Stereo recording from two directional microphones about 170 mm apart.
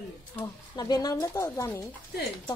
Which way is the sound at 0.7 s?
25° left (ahead or behind).